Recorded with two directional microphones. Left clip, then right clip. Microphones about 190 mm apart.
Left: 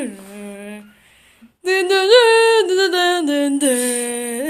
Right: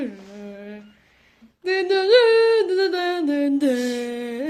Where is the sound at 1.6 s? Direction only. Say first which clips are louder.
Left 4 dB; 5° right (ahead or behind).